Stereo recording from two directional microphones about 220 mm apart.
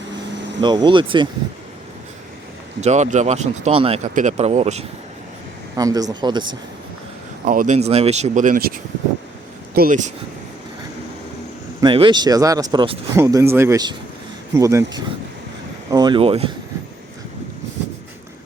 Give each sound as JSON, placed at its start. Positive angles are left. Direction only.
{"t": 0.6, "sound": "speech", "side_deg": -20}
{"t": 2.8, "sound": "speech", "side_deg": -30}
{"t": 5.7, "sound": "speech", "side_deg": -15}
{"t": 7.4, "sound": "speech", "side_deg": -35}
{"t": 11.8, "sound": "speech", "side_deg": -20}